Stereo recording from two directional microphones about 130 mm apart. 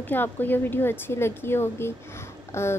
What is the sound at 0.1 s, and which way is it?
A woman's voice, 15° left (ahead or behind).